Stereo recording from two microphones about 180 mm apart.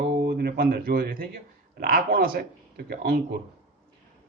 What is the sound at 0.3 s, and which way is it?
Speech, 60° right (ahead or behind).